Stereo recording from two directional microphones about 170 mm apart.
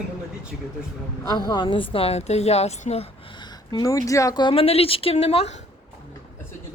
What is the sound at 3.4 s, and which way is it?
Speech, 25° left (ahead or behind).